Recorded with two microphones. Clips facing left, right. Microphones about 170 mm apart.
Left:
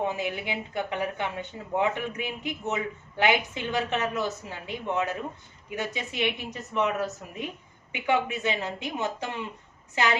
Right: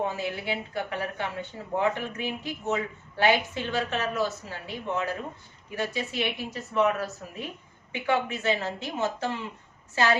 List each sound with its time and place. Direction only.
0.1 s a woman's voice: 20° left (ahead or behind)